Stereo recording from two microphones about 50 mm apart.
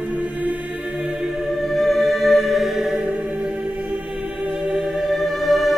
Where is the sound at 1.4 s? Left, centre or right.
Centre.